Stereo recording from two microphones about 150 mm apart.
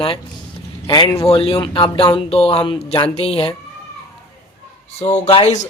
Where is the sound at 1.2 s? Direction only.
40° left (ahead or behind).